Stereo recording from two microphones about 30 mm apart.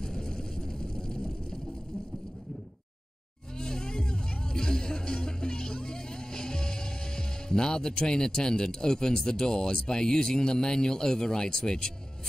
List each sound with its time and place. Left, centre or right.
0.0 s vehicle: left
3.5 s music: left
9.8 s a man's voice: left